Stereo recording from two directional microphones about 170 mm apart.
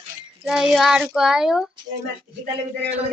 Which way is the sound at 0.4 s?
5° right (ahead or behind).